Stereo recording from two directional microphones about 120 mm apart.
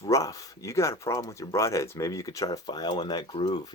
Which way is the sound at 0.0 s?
30° left (ahead or behind).